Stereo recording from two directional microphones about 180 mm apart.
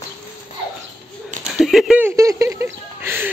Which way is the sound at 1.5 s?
Centre (ahead or behind).